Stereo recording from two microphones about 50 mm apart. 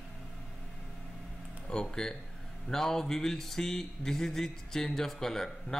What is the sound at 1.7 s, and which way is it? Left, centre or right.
Speech, centre.